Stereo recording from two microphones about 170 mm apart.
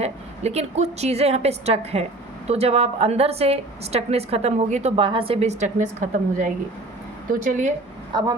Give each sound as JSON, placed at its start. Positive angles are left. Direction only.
{"t": 0.0, "sound": "a woman's voice", "side_deg": -40}
{"t": 8.1, "sound": "a woman's voice", "side_deg": -25}